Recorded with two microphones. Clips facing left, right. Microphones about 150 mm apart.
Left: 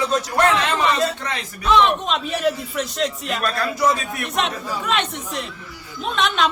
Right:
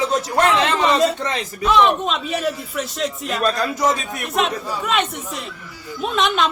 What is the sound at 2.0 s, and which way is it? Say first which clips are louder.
A man's voice: left 1 dB; centre (ahead or behind).